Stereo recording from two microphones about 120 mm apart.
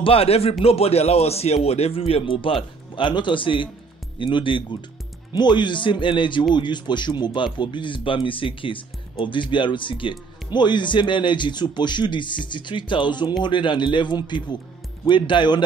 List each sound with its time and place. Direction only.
0.0 s speech: 55° left (ahead or behind)